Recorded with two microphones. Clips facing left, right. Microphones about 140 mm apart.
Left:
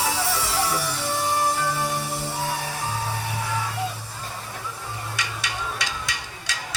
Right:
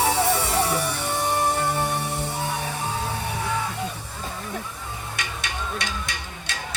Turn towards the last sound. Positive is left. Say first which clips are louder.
# even
turn(degrees=-55)  # may be behind; listen again after turning